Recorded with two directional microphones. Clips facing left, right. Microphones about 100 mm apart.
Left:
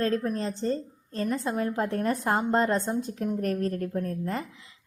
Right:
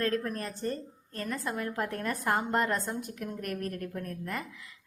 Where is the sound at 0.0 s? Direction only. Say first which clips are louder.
Left 4 dB; 25° left (ahead or behind).